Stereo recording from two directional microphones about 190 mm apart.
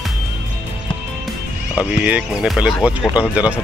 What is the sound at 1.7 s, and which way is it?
Speech, 5° right (ahead or behind).